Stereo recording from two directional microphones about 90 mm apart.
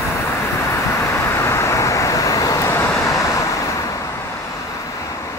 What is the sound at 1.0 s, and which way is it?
Vehicle, 30° left (ahead or behind).